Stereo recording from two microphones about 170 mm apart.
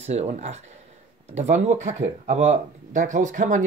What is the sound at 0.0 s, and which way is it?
Speech, 40° right (ahead or behind).